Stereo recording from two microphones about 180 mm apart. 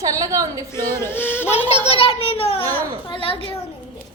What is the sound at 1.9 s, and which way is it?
A child's voice, 30° left (ahead or behind).